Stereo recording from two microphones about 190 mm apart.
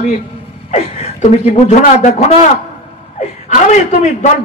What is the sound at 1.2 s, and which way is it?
A man's voice, 35° left (ahead or behind).